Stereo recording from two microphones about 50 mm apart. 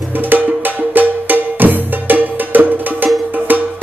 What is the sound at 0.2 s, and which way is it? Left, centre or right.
Music, right.